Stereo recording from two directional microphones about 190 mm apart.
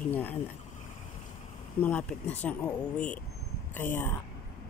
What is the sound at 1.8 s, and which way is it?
Speech, 5° left (ahead or behind).